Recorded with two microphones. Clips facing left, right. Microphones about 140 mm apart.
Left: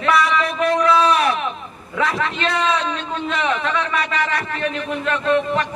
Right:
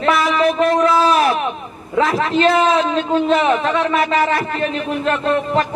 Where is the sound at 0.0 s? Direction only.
30° right (ahead or behind).